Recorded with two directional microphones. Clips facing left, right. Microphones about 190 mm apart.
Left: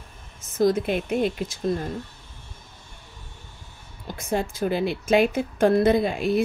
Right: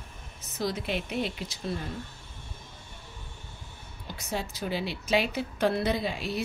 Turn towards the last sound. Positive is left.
turn(degrees=50)  # may be behind; listen again after turning